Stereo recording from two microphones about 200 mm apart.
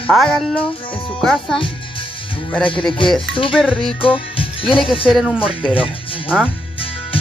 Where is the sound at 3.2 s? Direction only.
25° left (ahead or behind).